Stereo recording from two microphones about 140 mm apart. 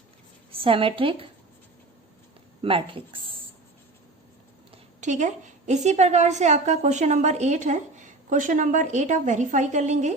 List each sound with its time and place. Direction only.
0.5 s speech: 40° right (ahead or behind)
2.6 s speech: 40° right (ahead or behind)
4.9 s a woman's voice: 60° right (ahead or behind)